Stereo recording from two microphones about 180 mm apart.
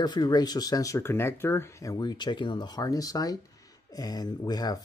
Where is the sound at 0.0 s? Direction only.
25° left (ahead or behind).